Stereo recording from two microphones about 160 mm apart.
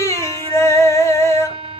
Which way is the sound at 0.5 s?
15° left (ahead or behind).